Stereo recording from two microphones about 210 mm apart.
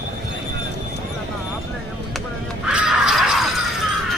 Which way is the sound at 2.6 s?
5° right (ahead or behind).